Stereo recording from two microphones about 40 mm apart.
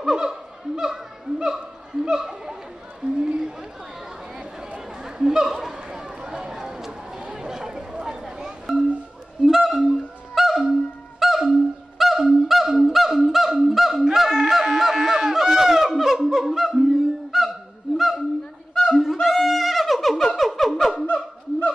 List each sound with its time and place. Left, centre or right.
0.0 s snicker: centre
3.0 s a sound: centre
4.7 s chatter: centre
9.4 s honk: centre
19.1 s wind instrument: centre
20.3 s a sound: centre
21.1 s honk: left